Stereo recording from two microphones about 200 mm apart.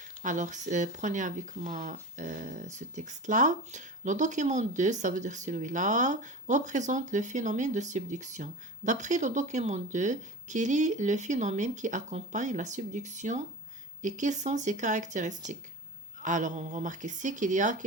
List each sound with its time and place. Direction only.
0.2 s speech: 40° right (ahead or behind)